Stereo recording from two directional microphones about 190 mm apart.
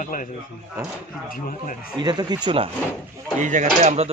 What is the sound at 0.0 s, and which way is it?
Speech, 45° left (ahead or behind).